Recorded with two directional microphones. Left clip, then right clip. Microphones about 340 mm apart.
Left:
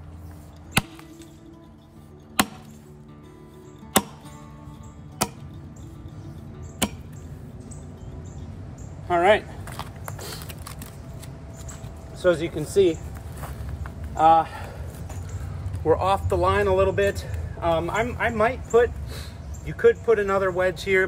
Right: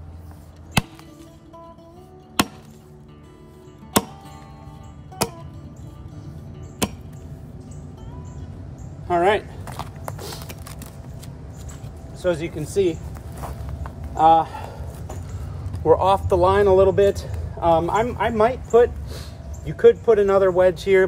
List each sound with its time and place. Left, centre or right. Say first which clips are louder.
0.8 s chop: right 1 dB; centre
2.4 s chop: right 1 dB; centre
5.2 s music: right 2 dB; centre
9.0 s a sound: even; centre
10.1 s clip-clop: right 2 dB; centre
12.2 s speech: left 2 dB; centre
13.4 s a sound: right 5 dB; centre
15.8 s a man's voice: right 5 dB; centre